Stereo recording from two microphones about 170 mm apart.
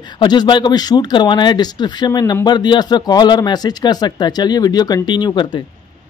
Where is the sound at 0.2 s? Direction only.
25° left (ahead or behind).